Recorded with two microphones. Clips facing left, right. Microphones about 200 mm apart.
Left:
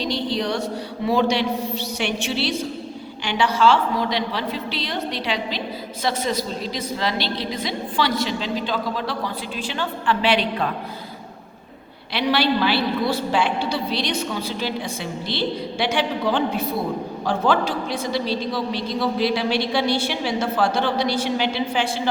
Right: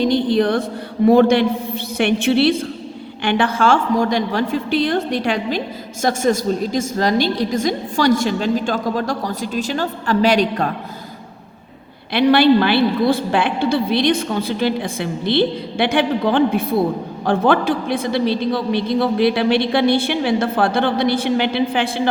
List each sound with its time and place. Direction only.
0.0 s a sound: 50° right (ahead or behind)
1.0 s a man's voice: 55° right (ahead or behind)
12.1 s a man's voice: 55° right (ahead or behind)